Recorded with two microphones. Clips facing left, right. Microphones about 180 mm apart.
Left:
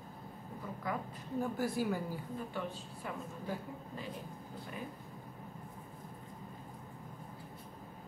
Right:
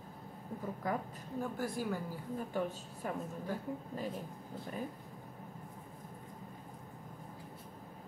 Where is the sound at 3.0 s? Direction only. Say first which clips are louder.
Right 4 dB; 45° right (ahead or behind).